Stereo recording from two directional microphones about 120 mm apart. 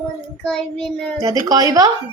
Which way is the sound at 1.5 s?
30° right (ahead or behind).